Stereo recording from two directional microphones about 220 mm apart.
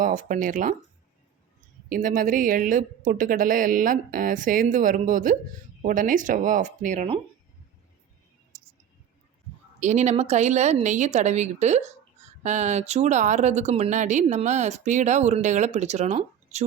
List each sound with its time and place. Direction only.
0.0 s speech: 35° right (ahead or behind)
1.9 s speech: 40° right (ahead or behind)
9.8 s speech: 30° right (ahead or behind)